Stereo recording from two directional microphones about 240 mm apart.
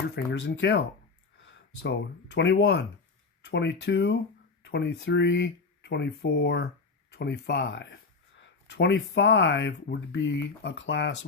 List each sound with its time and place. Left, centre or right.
0.3 s speech: left